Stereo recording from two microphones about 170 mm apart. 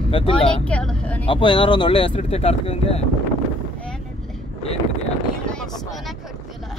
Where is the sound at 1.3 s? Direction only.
30° left (ahead or behind).